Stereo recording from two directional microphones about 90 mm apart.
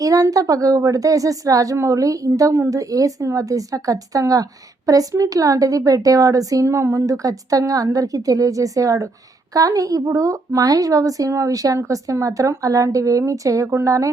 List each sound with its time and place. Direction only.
0.0 s a woman's voice: 40° right (ahead or behind)